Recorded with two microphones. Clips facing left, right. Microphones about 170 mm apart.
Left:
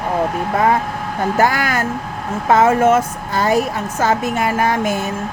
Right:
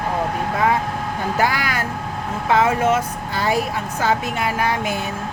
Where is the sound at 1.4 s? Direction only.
45° left (ahead or behind).